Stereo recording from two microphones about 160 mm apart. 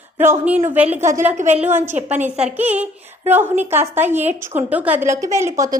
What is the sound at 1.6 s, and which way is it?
Speech, 15° right (ahead or behind).